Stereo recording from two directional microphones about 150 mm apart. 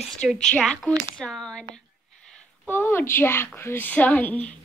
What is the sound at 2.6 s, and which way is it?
A woman's voice, 15° left (ahead or behind).